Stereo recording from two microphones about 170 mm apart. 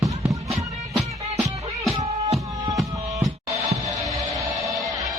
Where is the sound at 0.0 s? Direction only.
20° right (ahead or behind).